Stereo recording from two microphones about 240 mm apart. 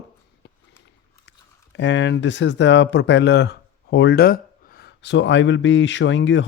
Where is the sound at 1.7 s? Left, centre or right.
Left.